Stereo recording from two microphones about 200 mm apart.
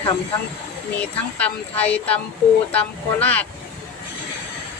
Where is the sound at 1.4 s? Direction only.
5° left (ahead or behind).